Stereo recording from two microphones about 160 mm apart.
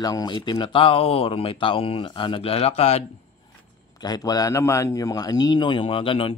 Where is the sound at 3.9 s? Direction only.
25° left (ahead or behind).